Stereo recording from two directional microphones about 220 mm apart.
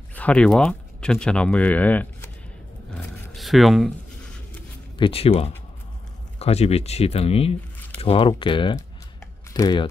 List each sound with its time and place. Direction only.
0.1 s speech: 5° left (ahead or behind)
2.9 s a sound: centre (ahead or behind)
4.9 s speech: 25° left (ahead or behind)